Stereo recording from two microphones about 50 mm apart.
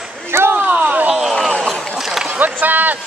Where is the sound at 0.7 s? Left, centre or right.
Right.